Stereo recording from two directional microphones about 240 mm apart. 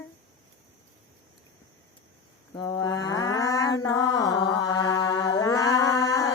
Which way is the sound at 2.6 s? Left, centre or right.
Centre.